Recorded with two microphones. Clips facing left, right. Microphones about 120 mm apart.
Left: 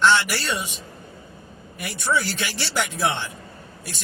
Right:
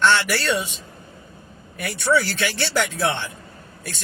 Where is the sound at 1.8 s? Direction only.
15° left (ahead or behind).